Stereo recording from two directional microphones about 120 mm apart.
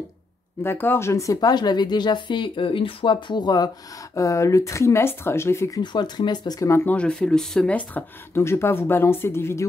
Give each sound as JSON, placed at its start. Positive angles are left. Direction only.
{"t": 0.7, "sound": "speech", "side_deg": 20}
{"t": 5.8, "sound": "speech", "side_deg": 35}
{"t": 6.7, "sound": "speech", "side_deg": 15}
{"t": 8.4, "sound": "speech", "side_deg": 20}